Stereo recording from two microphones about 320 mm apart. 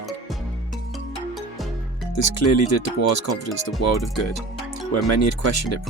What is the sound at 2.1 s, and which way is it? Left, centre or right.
Speech, left.